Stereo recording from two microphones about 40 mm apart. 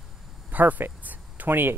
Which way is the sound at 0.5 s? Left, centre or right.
Right.